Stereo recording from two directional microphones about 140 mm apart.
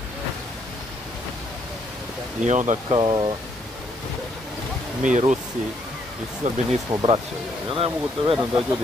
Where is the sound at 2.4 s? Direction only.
60° right (ahead or behind).